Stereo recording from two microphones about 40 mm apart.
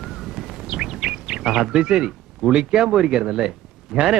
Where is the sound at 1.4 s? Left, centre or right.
Centre.